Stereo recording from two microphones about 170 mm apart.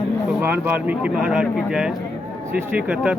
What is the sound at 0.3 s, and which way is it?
Speech, 10° right (ahead or behind).